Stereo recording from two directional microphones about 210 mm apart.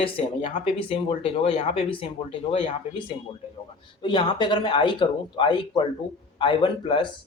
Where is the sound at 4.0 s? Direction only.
20° left (ahead or behind).